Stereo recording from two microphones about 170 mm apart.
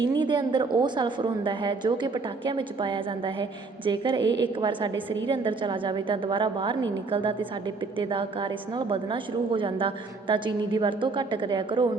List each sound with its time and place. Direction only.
0.0 s a woman's voice: 25° right (ahead or behind)